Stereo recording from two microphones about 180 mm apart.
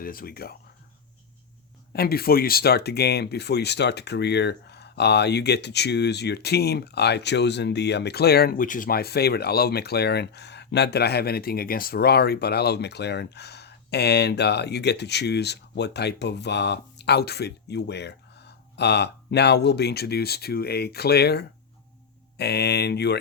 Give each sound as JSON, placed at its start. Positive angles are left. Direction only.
{"t": 0.0, "sound": "speech", "side_deg": 55}
{"t": 1.9, "sound": "speech", "side_deg": 60}